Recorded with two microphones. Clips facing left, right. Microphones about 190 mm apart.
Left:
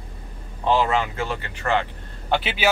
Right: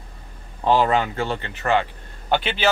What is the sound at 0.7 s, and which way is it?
Speech, 40° right (ahead or behind).